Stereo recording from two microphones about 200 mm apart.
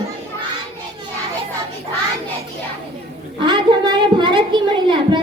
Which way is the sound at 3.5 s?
20° right (ahead or behind).